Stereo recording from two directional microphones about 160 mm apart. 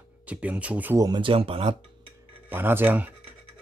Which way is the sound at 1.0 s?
30° right (ahead or behind).